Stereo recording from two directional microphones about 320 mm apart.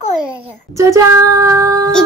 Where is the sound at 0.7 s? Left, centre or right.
Centre.